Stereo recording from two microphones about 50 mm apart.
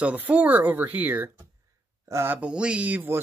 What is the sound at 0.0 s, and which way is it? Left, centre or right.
Speech, right.